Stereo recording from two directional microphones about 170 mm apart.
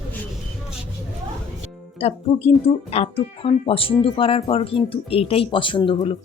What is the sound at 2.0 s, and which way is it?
Speech, 35° left (ahead or behind).